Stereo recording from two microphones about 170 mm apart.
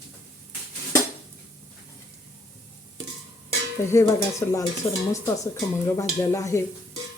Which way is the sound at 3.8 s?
15° left (ahead or behind).